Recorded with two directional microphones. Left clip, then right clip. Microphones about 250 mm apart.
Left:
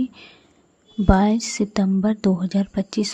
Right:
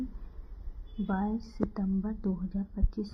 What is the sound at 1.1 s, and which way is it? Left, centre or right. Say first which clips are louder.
A woman's voice: left 16 dB; left.